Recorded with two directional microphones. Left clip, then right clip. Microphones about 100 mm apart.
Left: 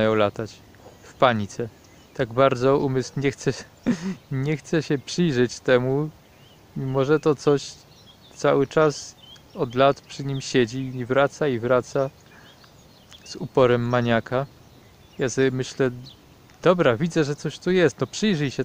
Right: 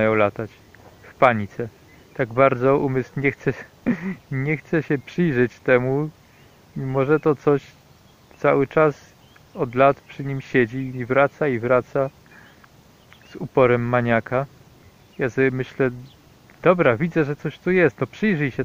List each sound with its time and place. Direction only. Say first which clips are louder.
0.0 s speech: right 2 dB; 25° left (ahead or behind)
8.4 s speech: right 2 dB; 20° left (ahead or behind)
11.8 s speech: right 2 dB; 10° left (ahead or behind)
13.6 s speech: right 2 dB; 20° left (ahead or behind)